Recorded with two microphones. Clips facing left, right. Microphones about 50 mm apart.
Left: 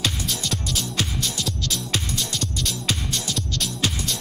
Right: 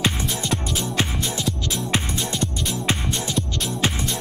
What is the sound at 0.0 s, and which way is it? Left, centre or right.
Music, right.